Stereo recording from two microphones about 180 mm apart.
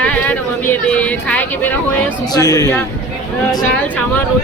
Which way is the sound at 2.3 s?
20° left (ahead or behind).